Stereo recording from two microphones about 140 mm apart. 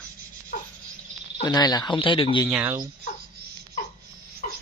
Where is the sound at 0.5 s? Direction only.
90° left.